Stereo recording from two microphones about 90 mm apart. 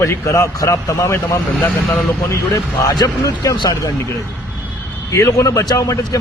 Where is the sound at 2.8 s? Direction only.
45° left (ahead or behind).